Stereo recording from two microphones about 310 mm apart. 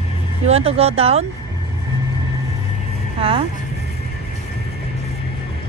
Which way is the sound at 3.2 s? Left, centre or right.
Centre.